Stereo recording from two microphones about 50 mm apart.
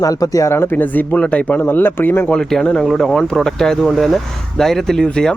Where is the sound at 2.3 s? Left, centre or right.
Centre.